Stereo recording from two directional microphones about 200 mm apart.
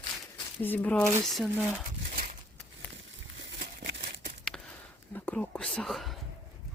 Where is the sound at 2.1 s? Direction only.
45° right (ahead or behind).